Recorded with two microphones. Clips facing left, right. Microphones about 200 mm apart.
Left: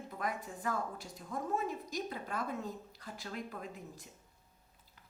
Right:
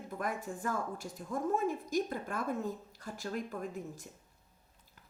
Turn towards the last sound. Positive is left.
turn(degrees=-45)  # may be behind; listen again after turning